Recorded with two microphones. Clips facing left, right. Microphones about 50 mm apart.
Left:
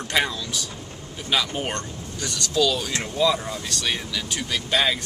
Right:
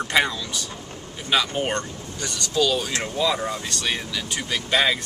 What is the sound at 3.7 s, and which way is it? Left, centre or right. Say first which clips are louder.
A man's voice: even; centre.